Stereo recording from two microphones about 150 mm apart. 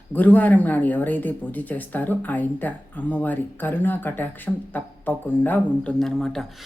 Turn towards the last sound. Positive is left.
turn(degrees=5)  # may be behind; listen again after turning